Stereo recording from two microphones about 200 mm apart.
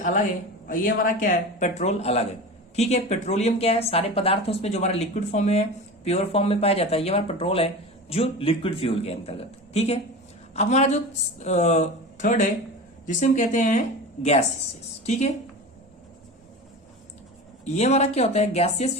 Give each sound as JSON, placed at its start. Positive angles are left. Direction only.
{"t": 0.7, "sound": "a woman's voice", "side_deg": 45}
{"t": 17.7, "sound": "speech", "side_deg": 35}